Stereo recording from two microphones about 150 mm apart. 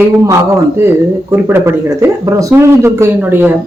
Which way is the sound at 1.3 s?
15° right (ahead or behind).